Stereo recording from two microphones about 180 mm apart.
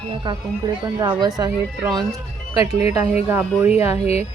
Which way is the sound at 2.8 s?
35° left (ahead or behind).